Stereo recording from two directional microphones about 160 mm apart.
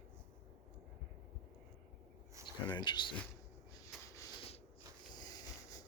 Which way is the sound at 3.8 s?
20° left (ahead or behind).